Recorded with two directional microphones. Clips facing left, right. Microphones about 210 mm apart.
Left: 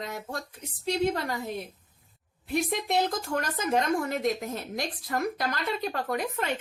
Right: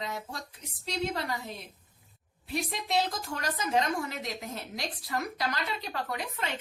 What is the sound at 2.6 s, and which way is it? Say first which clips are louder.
A woman's voice: left 4 dB; 50° left (ahead or behind).